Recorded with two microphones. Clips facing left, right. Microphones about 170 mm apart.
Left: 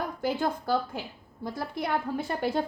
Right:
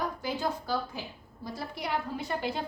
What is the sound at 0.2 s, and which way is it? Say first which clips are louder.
A woman's voice: left 4 dB; 55° left (ahead or behind).